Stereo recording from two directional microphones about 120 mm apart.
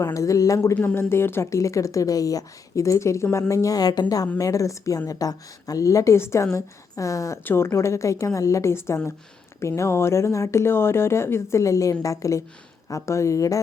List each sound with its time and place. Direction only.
0.0 s a woman's voice: 25° left (ahead or behind)
0.8 s a woman's voice: 15° left (ahead or behind)